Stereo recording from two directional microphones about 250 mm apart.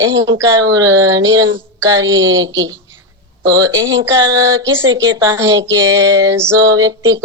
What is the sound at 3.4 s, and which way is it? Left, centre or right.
Speech, centre.